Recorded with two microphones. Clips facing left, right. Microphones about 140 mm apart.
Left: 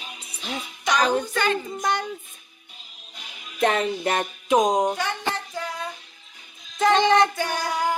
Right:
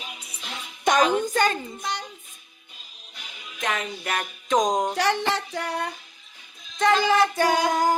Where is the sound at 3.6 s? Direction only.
30° left (ahead or behind).